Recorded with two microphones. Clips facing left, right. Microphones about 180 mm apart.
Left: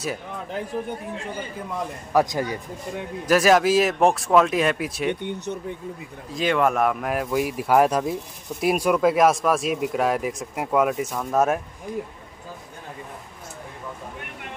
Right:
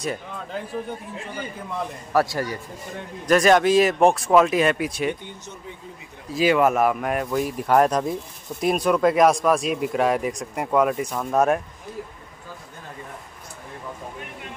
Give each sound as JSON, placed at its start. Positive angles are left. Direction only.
{"t": 2.1, "sound": "a man's voice", "side_deg": 15}
{"t": 3.3, "sound": "speech", "side_deg": 5}
{"t": 5.2, "sound": "speech", "side_deg": 65}
{"t": 6.3, "sound": "speech", "side_deg": -5}